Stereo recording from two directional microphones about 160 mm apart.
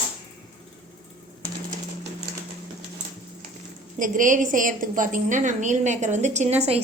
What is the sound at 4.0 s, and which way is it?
A woman's voice, 55° right (ahead or behind).